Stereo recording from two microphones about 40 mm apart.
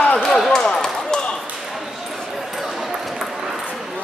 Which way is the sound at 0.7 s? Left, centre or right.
Centre.